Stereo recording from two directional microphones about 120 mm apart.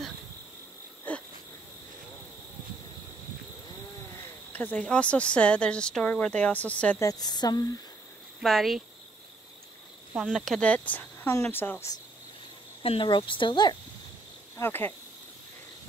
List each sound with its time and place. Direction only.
1.1 s wheeze: 15° left (ahead or behind)
4.5 s speech: 15° left (ahead or behind)
7.0 s speech: 30° left (ahead or behind)
8.4 s speech: centre (ahead or behind)
10.1 s speech: centre (ahead or behind); by 11.9 s 20° left (ahead or behind)
12.8 s speech: 50° left (ahead or behind)
14.6 s speech: 20° left (ahead or behind)